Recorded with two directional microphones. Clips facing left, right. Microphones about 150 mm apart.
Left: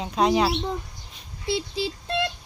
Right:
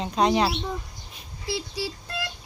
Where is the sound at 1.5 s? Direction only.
20° left (ahead or behind).